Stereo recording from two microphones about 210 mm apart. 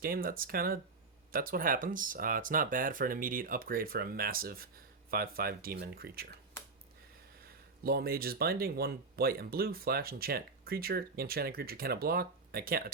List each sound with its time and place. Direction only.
0.0 s speech: 45° right (ahead or behind)
7.9 s speech: 45° right (ahead or behind)